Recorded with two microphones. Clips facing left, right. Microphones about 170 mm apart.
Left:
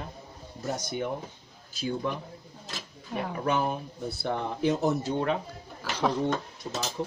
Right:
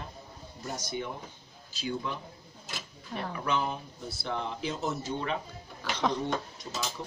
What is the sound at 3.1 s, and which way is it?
Speech, 10° left (ahead or behind).